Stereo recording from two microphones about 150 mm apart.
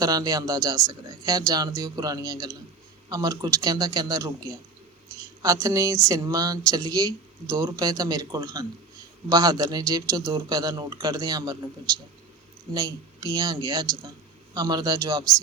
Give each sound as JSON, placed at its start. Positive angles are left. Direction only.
{"t": 0.0, "sound": "speech", "side_deg": -25}
{"t": 12.7, "sound": "speech", "side_deg": -25}